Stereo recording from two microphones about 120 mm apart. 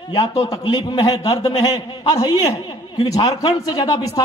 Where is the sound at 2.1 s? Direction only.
35° left (ahead or behind).